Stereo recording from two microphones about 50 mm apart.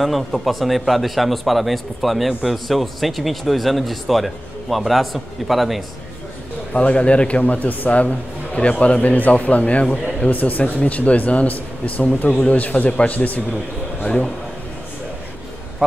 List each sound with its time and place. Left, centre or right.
0.0 s speech: centre
6.7 s a man's voice: left